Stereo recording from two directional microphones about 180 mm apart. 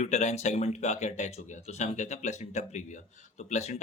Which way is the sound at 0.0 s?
40° left (ahead or behind).